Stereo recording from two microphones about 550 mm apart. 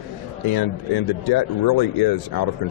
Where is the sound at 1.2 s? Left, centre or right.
Left.